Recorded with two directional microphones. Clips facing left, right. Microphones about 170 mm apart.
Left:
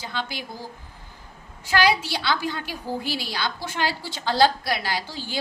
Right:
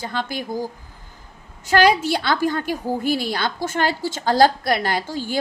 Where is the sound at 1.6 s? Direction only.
45° right (ahead or behind).